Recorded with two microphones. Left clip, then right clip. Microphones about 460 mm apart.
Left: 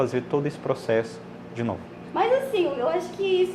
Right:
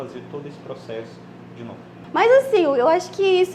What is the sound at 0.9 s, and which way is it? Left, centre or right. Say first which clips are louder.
Speech: left 8 dB; left.